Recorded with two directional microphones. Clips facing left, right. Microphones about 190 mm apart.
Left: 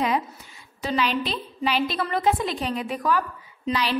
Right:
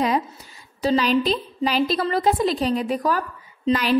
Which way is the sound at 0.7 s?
40° right (ahead or behind).